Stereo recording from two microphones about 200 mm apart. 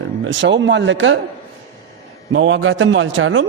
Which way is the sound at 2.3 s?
70° right (ahead or behind).